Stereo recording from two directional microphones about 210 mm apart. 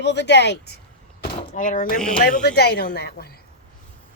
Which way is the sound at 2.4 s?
50° left (ahead or behind).